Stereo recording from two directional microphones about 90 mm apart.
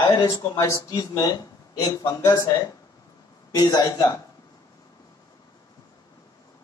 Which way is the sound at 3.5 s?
40° left (ahead or behind).